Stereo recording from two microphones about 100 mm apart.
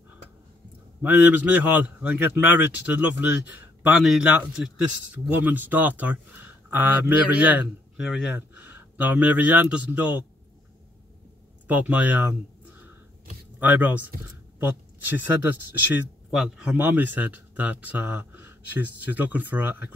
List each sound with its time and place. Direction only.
1.0 s speech: 15° right (ahead or behind)
4.0 s speech: 5° right (ahead or behind)
8.0 s speech: 5° right (ahead or behind)
8.4 s speech: 20° right (ahead or behind)
11.6 s speech: 15° right (ahead or behind)
16.3 s speech: 5° right (ahead or behind)
16.7 s speech: 15° right (ahead or behind)